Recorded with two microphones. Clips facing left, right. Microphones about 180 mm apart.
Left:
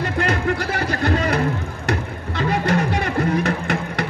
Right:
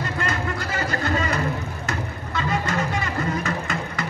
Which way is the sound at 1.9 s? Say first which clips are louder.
Left 8 dB; 70° left (ahead or behind).